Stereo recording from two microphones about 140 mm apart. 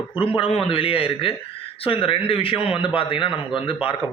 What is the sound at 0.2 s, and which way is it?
A man's voice, 40° left (ahead or behind).